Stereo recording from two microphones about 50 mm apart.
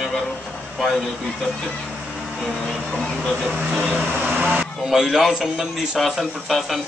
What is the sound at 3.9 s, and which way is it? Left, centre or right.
Vehicle, right.